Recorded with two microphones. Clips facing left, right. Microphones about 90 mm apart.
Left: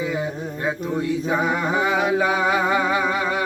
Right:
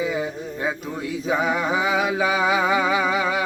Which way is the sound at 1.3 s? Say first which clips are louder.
Right 2 dB; centre (ahead or behind).